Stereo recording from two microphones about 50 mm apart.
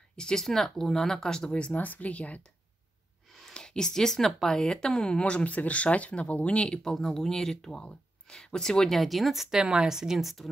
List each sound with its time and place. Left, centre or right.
0.1 s speech: centre
1.8 s speech: left
3.3 s speech: centre